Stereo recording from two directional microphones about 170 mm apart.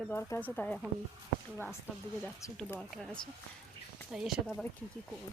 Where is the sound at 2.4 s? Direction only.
20° left (ahead or behind).